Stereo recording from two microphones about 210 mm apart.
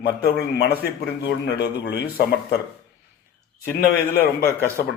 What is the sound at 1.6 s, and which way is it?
Speech, 50° left (ahead or behind).